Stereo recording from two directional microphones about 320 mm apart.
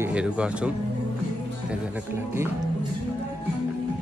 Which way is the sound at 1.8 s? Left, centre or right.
Centre.